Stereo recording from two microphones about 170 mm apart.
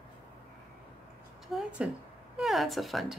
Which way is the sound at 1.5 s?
5° right (ahead or behind).